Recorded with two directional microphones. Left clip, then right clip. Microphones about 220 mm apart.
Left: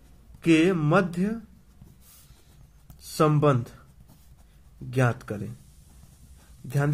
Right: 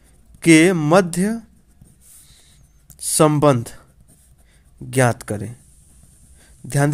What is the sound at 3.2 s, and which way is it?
Speech, 45° right (ahead or behind).